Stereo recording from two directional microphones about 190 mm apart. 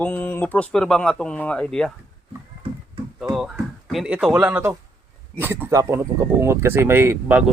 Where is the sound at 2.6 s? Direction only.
30° right (ahead or behind).